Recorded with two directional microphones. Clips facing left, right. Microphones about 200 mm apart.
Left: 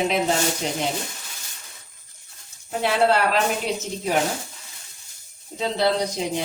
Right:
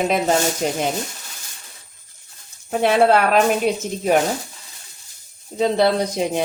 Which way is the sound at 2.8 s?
55° right (ahead or behind).